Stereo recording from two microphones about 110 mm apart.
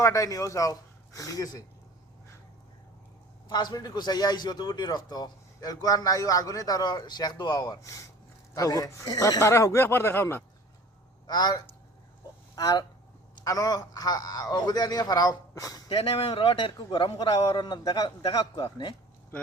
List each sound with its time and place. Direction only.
0.0 s speech: 30° left (ahead or behind)
3.5 s speech: 40° left (ahead or behind); by 10.4 s 20° left (ahead or behind)
11.3 s speech: 40° left (ahead or behind)
15.9 s a man's voice: 50° left (ahead or behind)